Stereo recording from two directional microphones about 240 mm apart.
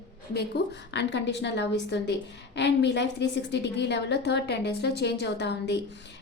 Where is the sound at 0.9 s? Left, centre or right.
Left.